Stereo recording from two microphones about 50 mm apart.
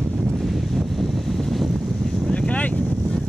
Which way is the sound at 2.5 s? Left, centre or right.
Left.